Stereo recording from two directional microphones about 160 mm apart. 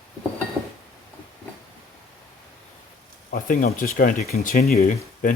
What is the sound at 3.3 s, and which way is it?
Speech, 60° left (ahead or behind).